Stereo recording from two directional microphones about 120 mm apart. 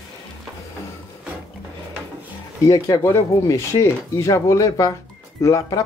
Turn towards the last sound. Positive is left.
turn(degrees=25)  # may be behind; listen again after turning